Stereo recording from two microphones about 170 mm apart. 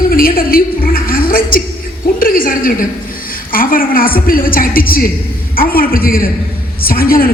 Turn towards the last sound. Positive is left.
turn(degrees=60)  # may be behind; listen again after turning